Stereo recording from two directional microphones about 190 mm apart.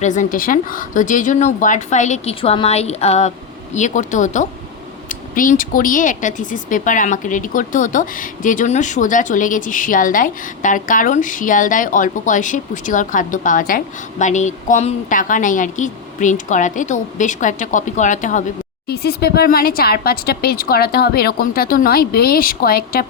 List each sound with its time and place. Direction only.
0.0 s speech: 40° left (ahead or behind)
18.9 s speech: 55° left (ahead or behind)